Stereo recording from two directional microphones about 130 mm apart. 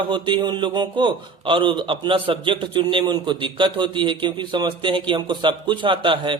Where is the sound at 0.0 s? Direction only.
40° right (ahead or behind).